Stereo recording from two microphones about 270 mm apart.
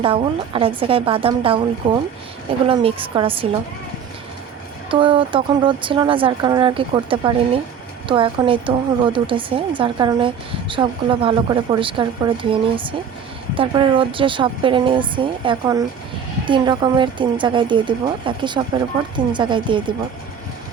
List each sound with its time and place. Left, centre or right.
0.0 s a woman's voice: centre
4.9 s a woman's voice: centre